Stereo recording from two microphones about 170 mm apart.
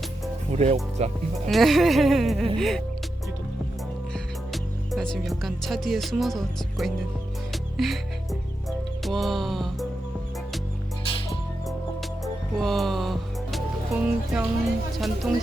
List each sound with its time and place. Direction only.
0.5 s speech: 40° right (ahead or behind)
1.5 s speech: centre (ahead or behind)
4.1 s speech: centre (ahead or behind)
7.5 s music: centre (ahead or behind)
9.0 s speech: centre (ahead or behind)
12.2 s music: centre (ahead or behind)
14.9 s speech: centre (ahead or behind)